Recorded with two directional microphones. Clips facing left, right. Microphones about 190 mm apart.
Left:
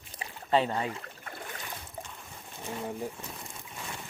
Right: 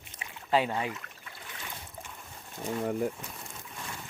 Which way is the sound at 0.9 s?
30° left (ahead or behind).